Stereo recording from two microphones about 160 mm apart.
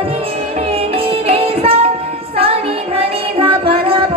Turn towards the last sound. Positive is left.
turn(degrees=-35)  # may be behind; listen again after turning